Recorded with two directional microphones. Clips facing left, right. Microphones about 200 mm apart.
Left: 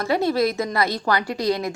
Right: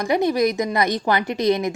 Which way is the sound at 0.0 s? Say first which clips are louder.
Right 2 dB; 15° right (ahead or behind).